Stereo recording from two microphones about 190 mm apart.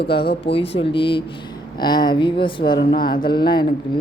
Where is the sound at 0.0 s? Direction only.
25° left (ahead or behind).